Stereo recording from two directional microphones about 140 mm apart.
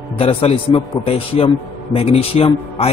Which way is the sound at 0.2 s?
45° left (ahead or behind).